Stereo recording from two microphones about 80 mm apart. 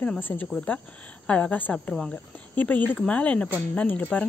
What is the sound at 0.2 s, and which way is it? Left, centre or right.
Speech, left.